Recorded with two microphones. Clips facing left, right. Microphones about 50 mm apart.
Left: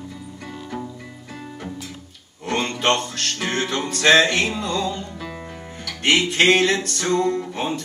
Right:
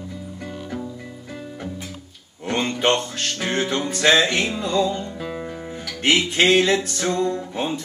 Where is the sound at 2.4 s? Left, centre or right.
Centre.